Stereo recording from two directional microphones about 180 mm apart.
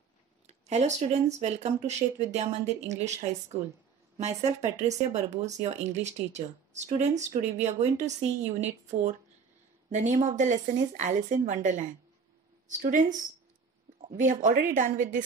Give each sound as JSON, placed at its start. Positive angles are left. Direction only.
{"t": 0.5, "sound": "speech", "side_deg": -40}
{"t": 14.0, "sound": "speech", "side_deg": -45}